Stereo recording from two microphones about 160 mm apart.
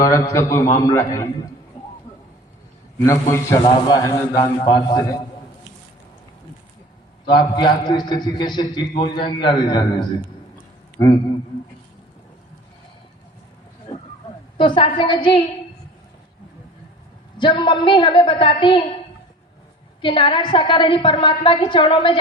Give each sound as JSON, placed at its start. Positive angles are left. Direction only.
{"t": 0.0, "sound": "a man's voice", "side_deg": 20}
{"t": 3.1, "sound": "a man's voice", "side_deg": 20}
{"t": 7.3, "sound": "a man's voice", "side_deg": 30}
{"t": 14.8, "sound": "a woman's voice", "side_deg": 30}
{"t": 17.3, "sound": "a woman's voice", "side_deg": 30}
{"t": 20.0, "sound": "a woman's voice", "side_deg": 30}